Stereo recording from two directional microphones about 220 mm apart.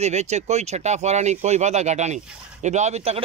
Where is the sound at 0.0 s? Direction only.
30° right (ahead or behind).